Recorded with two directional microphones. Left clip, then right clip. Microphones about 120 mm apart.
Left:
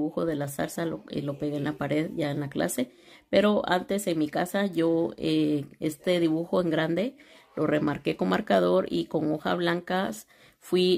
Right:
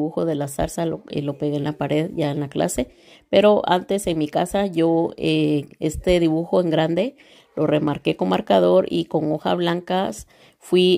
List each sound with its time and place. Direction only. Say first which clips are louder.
0.1 s speech: right 6 dB; 40° right (ahead or behind)